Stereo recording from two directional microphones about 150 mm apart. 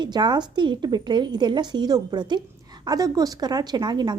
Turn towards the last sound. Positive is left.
turn(degrees=-30)  # may be behind; listen again after turning